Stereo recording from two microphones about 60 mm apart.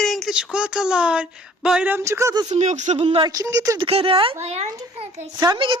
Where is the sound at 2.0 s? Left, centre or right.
Right.